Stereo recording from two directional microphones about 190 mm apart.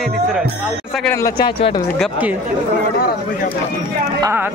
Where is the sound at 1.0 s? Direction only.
20° left (ahead or behind).